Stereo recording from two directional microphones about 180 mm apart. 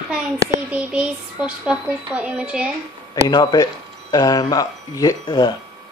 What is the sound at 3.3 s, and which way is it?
Speech, 20° left (ahead or behind).